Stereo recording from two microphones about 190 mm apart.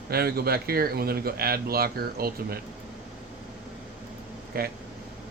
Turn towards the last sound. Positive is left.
turn(degrees=-50)  # may be behind; listen again after turning